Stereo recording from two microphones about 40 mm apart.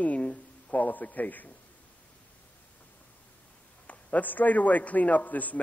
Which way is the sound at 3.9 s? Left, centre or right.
Left.